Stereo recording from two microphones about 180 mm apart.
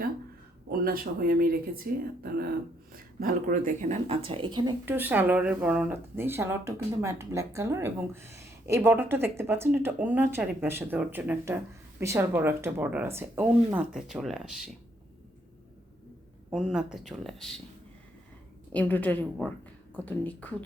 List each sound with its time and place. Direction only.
0.7 s speech: 55° right (ahead or behind); by 4.7 s 25° right (ahead or behind)
4.9 s speech: 10° right (ahead or behind)
16.5 s speech: 5° right (ahead or behind)
18.7 s a woman's voice: 10° left (ahead or behind)